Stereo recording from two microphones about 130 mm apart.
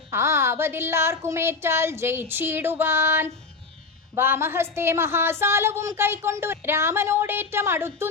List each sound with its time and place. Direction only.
0.1 s a woman's voice: 20° right (ahead or behind)